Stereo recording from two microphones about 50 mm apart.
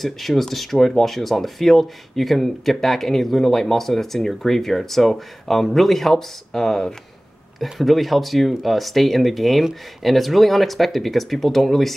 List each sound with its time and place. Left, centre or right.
0.0 s speech: centre